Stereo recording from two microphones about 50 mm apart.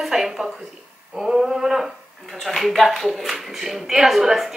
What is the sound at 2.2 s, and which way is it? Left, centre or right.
A woman's voice, centre.